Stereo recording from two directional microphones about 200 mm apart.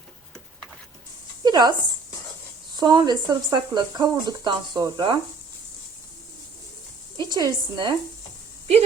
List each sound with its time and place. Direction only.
1.5 s speech: 20° right (ahead or behind)
2.7 s speech: 20° right (ahead or behind)
7.2 s speech: 20° right (ahead or behind)